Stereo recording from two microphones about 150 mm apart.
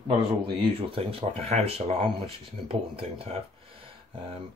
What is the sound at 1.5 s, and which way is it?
Speech, 45° right (ahead or behind).